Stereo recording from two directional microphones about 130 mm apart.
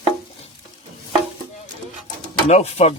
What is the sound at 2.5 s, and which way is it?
Speech, 55° left (ahead or behind).